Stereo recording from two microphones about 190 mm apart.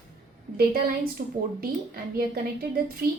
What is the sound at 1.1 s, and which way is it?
A woman's voice, 50° right (ahead or behind).